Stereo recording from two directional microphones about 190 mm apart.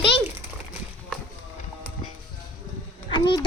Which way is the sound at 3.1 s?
25° left (ahead or behind).